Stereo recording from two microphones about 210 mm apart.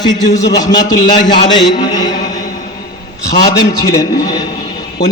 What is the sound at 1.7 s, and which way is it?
Mantra, 20° left (ahead or behind).